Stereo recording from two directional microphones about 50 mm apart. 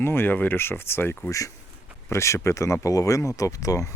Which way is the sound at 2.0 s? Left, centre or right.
Left.